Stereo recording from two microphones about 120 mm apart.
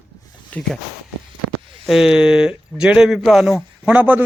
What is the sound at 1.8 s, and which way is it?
A man's voice, centre (ahead or behind).